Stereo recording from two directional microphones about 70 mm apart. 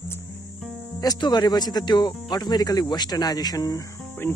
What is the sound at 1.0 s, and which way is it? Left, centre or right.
Speech, left.